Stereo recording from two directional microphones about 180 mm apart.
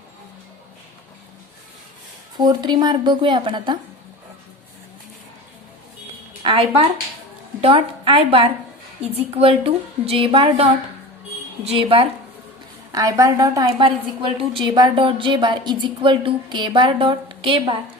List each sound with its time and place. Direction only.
2.4 s a woman's voice: 25° right (ahead or behind)
6.4 s a woman's voice: 25° right (ahead or behind)
11.7 s a woman's voice: 30° right (ahead or behind)
12.9 s a woman's voice: 20° right (ahead or behind)